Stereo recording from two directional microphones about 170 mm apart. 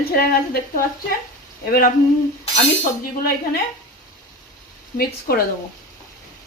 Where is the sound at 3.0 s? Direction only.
60° left (ahead or behind).